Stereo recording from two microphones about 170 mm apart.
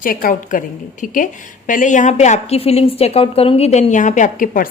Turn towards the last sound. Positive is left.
turn(degrees=50)  # may be behind; listen again after turning